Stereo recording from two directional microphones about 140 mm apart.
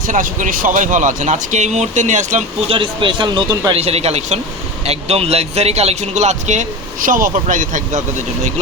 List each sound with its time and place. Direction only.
0.1 s speech: 70° right (ahead or behind)
2.6 s speech: 35° right (ahead or behind)
3.7 s speech: 45° right (ahead or behind); by 8.0 s 65° right (ahead or behind)